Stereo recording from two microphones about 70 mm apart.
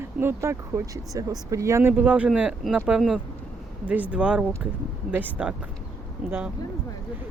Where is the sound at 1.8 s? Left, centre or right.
Right.